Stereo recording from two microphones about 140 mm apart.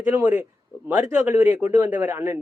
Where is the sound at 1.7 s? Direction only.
10° right (ahead or behind).